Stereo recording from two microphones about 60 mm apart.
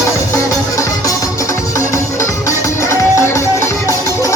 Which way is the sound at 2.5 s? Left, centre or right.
Left.